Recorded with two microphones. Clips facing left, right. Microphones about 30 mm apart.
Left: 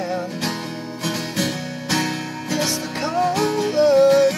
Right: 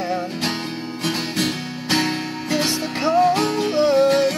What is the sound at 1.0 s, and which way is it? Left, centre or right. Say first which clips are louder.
Music: right 1 dB; right.